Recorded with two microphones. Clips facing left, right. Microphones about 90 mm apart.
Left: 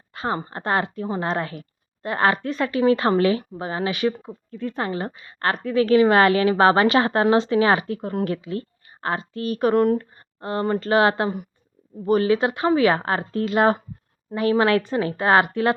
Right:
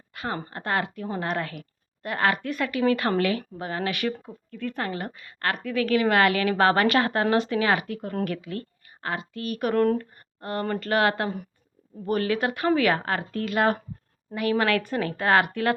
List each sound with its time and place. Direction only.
0.1 s a woman's voice: 30° left (ahead or behind)
9.7 s a woman's voice: 15° left (ahead or behind)